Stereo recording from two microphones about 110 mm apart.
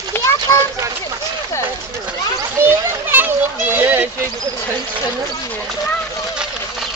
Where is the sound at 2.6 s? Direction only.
20° right (ahead or behind).